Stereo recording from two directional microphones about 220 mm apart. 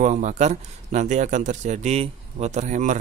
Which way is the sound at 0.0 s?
35° right (ahead or behind).